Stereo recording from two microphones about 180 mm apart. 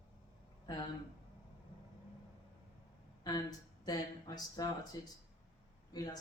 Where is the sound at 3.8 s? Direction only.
20° left (ahead or behind).